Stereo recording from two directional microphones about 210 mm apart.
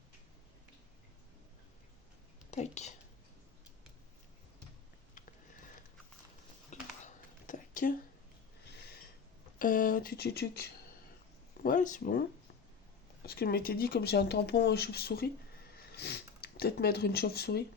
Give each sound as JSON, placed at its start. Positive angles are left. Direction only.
{"t": 2.5, "sound": "a woman's voice", "side_deg": 30}
{"t": 5.1, "sound": "a sound", "side_deg": 40}
{"t": 8.6, "sound": "snort", "side_deg": 50}
{"t": 9.6, "sound": "speech", "side_deg": 40}
{"t": 11.6, "sound": "speech", "side_deg": 40}
{"t": 13.2, "sound": "speech", "side_deg": 50}